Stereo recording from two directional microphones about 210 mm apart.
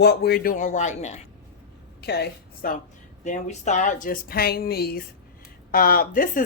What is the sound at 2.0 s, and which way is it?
Speech, 50° left (ahead or behind).